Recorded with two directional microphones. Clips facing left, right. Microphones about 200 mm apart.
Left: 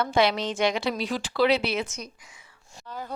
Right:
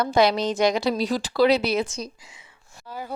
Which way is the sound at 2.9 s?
10° right (ahead or behind).